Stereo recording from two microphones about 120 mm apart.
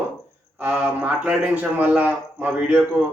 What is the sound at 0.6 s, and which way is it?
A man's voice, 10° right (ahead or behind).